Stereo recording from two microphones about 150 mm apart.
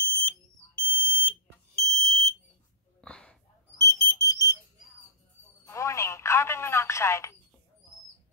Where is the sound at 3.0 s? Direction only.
5° left (ahead or behind).